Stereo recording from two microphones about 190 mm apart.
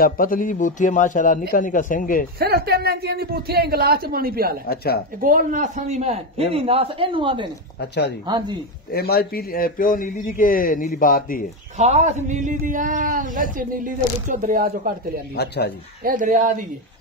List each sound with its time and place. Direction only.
0.0 s a man's voice: 45° left (ahead or behind)
2.3 s speech: 55° right (ahead or behind)
4.6 s speech: 55° left (ahead or behind)
5.2 s a man's voice: 45° right (ahead or behind); by 7.4 s 25° right (ahead or behind)
7.8 s speech: 60° left (ahead or behind)
8.3 s speech: 25° right (ahead or behind)
8.9 s a man's voice: 55° left (ahead or behind)
11.8 s a man's voice: 35° right (ahead or behind)
15.3 s speech: 60° left (ahead or behind)
16.0 s a man's voice: 45° right (ahead or behind)